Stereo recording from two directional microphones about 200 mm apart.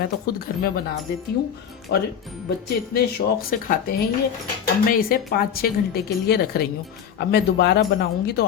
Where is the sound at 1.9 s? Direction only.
55° left (ahead or behind).